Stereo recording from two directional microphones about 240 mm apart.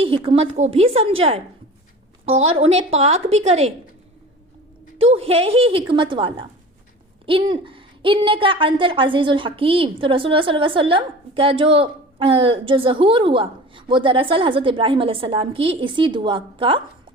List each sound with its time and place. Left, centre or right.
0.0 s a woman's voice: right
2.6 s a woman's voice: right
4.9 s a woman's voice: right